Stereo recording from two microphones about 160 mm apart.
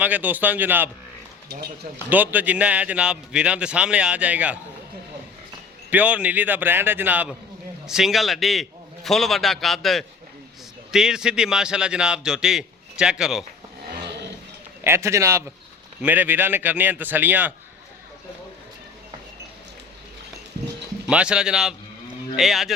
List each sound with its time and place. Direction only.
0.0 s a man's voice: 10° right (ahead or behind)
2.0 s a man's voice: 10° right (ahead or behind)
5.9 s a man's voice: 10° right (ahead or behind)
14.8 s a man's voice: 15° right (ahead or behind)
21.1 s a man's voice: 5° right (ahead or behind)